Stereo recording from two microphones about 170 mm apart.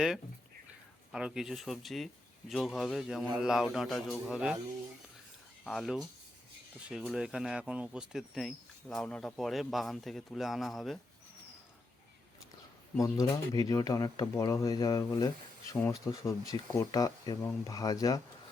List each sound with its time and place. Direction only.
1.1 s speech: 5° right (ahead or behind)
5.6 s speech: centre (ahead or behind)
13.0 s speech: 20° left (ahead or behind)